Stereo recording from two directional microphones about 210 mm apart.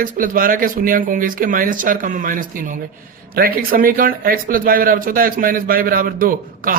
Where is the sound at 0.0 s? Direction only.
40° right (ahead or behind).